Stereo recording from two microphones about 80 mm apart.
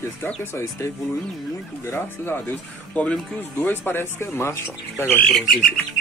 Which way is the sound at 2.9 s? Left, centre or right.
Centre.